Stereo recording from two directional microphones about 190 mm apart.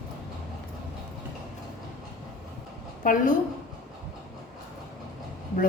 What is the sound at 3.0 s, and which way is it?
Speech, 45° left (ahead or behind).